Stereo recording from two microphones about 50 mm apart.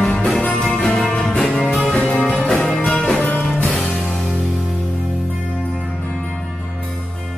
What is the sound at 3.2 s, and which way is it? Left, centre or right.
Music, left.